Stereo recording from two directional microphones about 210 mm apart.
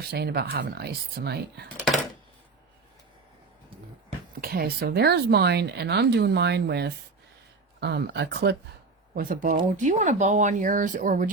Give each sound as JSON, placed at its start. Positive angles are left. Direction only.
{"t": 0.0, "sound": "speech", "side_deg": -50}
{"t": 4.4, "sound": "speech", "side_deg": -45}
{"t": 9.1, "sound": "speech", "side_deg": -40}